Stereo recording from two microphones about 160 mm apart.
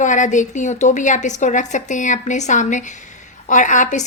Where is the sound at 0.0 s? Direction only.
50° left (ahead or behind).